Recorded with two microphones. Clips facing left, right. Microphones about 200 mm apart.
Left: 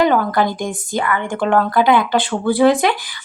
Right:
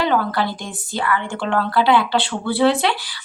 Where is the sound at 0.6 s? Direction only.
50° left (ahead or behind).